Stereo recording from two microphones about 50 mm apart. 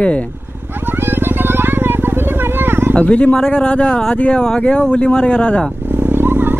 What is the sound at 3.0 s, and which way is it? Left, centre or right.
Speech, left.